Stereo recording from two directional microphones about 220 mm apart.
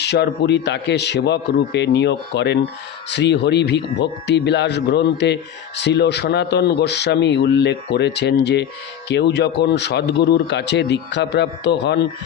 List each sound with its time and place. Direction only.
0.0 s a man's voice: 50° left (ahead or behind)